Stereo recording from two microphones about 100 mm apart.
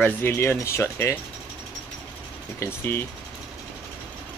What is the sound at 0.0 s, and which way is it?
Speech, 20° left (ahead or behind).